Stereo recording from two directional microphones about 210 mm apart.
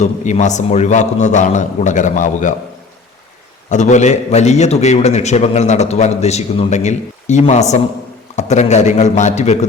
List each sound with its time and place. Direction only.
0.0 s a man's voice: 35° left (ahead or behind)
3.7 s a man's voice: 35° left (ahead or behind)